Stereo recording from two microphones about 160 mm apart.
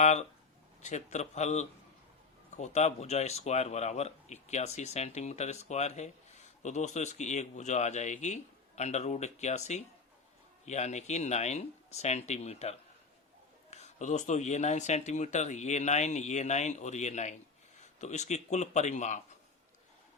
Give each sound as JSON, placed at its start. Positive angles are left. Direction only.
{"t": 0.0, "sound": "a man's voice", "side_deg": 45}